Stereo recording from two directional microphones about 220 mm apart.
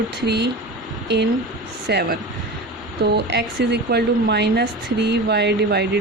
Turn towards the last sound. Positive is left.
turn(degrees=-50)  # may be behind; listen again after turning